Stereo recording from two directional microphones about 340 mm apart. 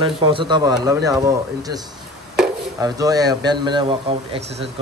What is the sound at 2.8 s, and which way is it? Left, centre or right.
A man's voice, centre.